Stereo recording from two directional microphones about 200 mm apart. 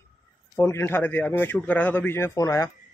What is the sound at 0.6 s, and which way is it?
A man's voice, 10° left (ahead or behind).